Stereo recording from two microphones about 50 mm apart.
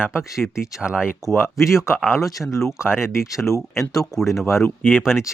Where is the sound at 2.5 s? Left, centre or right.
Left.